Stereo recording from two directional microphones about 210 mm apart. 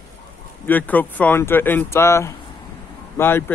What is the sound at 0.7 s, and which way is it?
Speech, 10° left (ahead or behind).